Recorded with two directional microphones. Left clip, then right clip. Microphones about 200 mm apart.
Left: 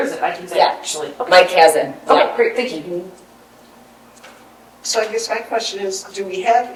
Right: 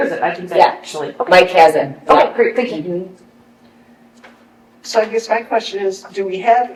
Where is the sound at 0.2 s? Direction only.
20° left (ahead or behind).